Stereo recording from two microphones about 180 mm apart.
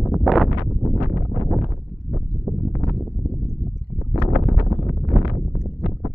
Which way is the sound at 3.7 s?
70° left (ahead or behind).